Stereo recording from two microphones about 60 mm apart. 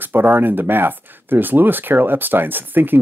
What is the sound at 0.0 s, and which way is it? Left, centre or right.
Speech, right.